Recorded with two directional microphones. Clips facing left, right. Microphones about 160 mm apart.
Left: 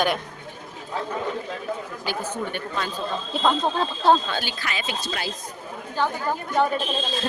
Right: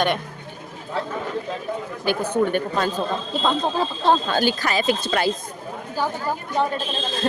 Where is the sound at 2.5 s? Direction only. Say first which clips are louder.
Right 7 dB; 45° right (ahead or behind).